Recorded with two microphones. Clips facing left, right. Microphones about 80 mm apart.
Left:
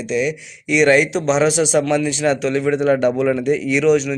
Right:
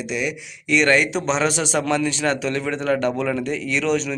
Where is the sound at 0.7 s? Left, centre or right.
Centre.